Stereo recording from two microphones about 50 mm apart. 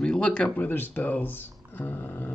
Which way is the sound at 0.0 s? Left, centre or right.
Centre.